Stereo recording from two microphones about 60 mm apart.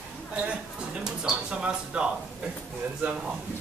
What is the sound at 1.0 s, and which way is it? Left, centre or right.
Speech, centre.